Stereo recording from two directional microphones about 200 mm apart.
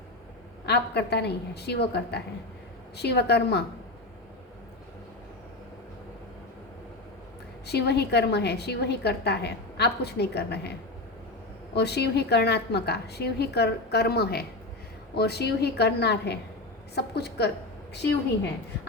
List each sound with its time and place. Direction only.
0.6 s a woman's voice: 55° left (ahead or behind)
7.7 s a woman's voice: 55° left (ahead or behind)